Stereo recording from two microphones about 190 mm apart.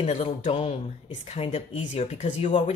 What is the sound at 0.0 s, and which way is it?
Speech, 35° left (ahead or behind).